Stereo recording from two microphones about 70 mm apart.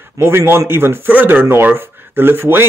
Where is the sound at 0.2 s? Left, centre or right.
Right.